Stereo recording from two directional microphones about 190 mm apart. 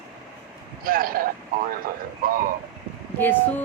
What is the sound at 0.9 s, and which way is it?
Speech, 50° right (ahead or behind).